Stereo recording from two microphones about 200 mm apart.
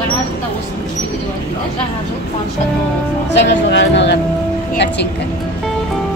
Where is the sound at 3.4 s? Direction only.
60° left (ahead or behind).